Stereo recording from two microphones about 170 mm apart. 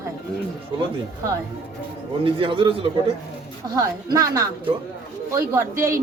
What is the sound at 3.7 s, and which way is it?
A woman's voice, 20° right (ahead or behind).